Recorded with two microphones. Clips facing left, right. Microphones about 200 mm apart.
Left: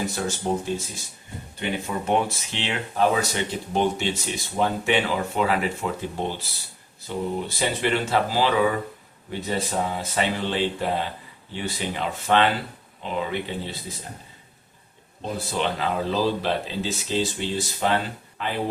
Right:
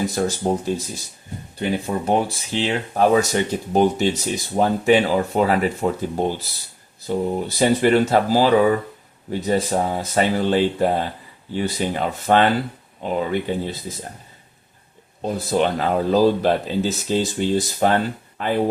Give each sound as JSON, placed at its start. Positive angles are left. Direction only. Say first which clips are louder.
{"t": 0.2, "sound": "speech", "louder": "right 6 dB", "side_deg": -40}
{"t": 1.5, "sound": "speech", "louder": "right 5 dB", "side_deg": -40}
{"t": 15.2, "sound": "speech", "louder": "right 7 dB", "side_deg": -45}